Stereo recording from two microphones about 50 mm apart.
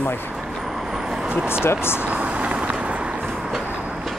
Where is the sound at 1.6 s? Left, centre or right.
Left.